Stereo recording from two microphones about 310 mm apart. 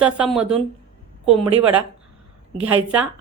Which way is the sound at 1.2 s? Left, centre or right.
Centre.